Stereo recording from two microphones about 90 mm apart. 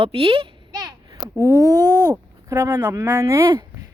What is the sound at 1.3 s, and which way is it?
Speech, 35° right (ahead or behind).